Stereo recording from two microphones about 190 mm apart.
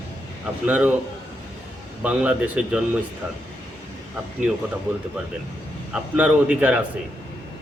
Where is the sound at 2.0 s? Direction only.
5° right (ahead or behind).